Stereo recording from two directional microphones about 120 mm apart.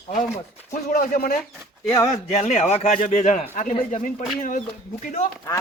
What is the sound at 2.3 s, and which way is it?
A man's voice, 60° left (ahead or behind).